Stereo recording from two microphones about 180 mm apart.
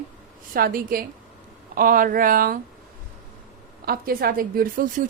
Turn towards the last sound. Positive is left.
turn(degrees=-50)  # may be behind; listen again after turning